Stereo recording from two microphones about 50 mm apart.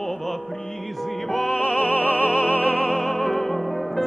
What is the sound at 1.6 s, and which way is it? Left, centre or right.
Music, left.